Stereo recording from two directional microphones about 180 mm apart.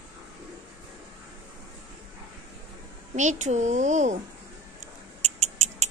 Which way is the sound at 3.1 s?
40° right (ahead or behind).